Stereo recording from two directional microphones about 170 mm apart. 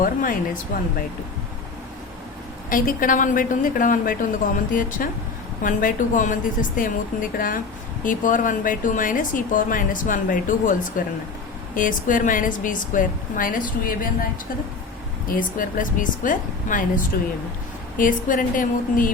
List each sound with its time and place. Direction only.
0.0 s speech: 55° left (ahead or behind)
2.6 s speech: 55° left (ahead or behind)
15.3 s speech: 55° left (ahead or behind)